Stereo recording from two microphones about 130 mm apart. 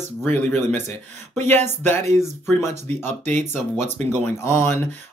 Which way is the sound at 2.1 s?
20° left (ahead or behind).